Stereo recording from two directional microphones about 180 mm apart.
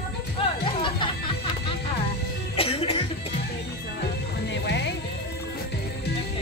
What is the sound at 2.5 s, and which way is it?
Music, 30° left (ahead or behind).